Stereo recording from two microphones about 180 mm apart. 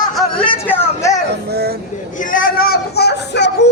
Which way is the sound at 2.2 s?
50° left (ahead or behind).